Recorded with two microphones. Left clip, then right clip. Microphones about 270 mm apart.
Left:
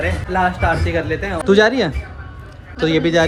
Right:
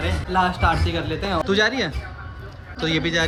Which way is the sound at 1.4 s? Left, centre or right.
Centre.